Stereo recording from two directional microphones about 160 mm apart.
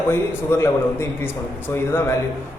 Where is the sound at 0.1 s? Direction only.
15° left (ahead or behind).